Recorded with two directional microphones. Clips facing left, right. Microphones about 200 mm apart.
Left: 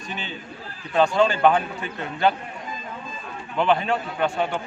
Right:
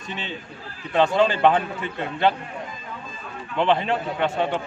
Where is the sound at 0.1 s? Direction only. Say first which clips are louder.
Right 2 dB; 25° right (ahead or behind).